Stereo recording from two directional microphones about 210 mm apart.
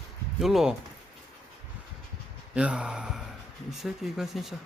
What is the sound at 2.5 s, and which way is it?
Speech, 5° right (ahead or behind).